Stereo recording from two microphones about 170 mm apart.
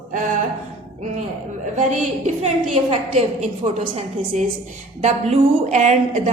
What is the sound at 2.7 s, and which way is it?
Speech, 40° right (ahead or behind).